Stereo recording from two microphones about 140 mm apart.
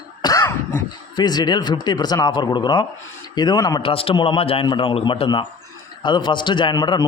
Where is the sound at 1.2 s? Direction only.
30° left (ahead or behind).